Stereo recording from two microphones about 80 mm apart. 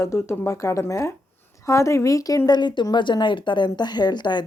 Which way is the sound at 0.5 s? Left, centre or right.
Left.